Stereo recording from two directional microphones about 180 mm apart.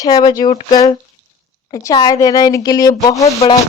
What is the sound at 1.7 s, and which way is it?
Speech, 20° left (ahead or behind).